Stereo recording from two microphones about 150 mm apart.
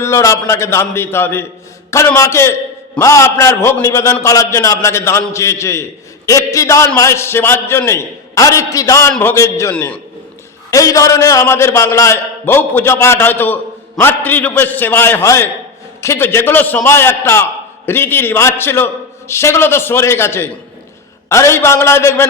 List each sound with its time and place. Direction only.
0.0 s a man's voice: 20° left (ahead or behind)
9.7 s a man's voice: 10° left (ahead or behind)
10.7 s a man's voice: 20° left (ahead or behind)